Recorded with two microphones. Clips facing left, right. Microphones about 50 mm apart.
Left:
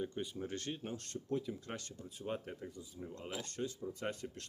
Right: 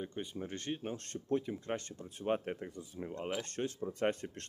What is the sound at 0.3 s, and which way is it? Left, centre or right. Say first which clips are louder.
Speech: right 2 dB; right.